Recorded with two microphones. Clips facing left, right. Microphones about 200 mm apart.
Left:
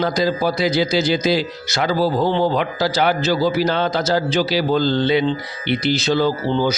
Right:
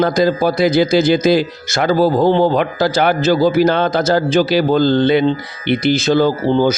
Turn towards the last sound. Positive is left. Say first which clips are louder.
# right 5 dB
turn(degrees=-50)  # may be behind; listen again after turning